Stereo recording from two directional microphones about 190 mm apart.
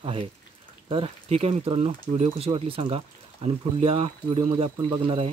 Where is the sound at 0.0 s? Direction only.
30° right (ahead or behind).